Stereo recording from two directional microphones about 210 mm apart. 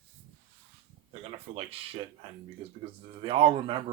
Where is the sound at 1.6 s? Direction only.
25° right (ahead or behind).